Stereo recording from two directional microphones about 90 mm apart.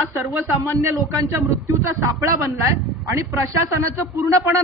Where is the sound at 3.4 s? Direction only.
35° right (ahead or behind).